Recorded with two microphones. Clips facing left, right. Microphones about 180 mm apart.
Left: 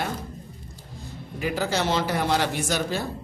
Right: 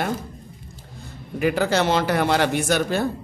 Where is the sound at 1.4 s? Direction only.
65° right (ahead or behind).